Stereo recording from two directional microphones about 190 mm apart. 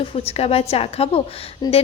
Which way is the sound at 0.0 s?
30° left (ahead or behind).